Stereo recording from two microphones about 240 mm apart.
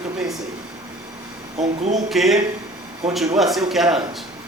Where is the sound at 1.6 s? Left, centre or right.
Right.